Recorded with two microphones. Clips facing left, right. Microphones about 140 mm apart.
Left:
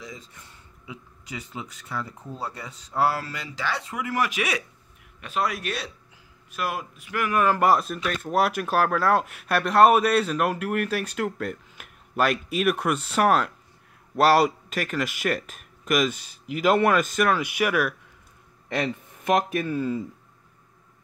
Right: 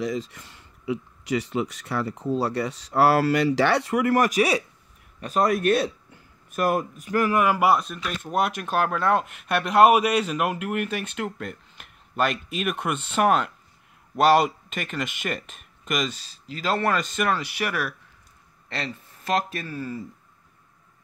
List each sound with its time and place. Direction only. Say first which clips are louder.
0.0 s speech: right 13 dB; 85° right; by 4.3 s 60° right (ahead or behind)
4.3 s speech: right 6 dB; 35° right (ahead or behind)
7.3 s speech: left 2 dB; 10° right (ahead or behind); by 17.0 s 15° left (ahead or behind)
17.1 s speech: left 2 dB; centre (ahead or behind)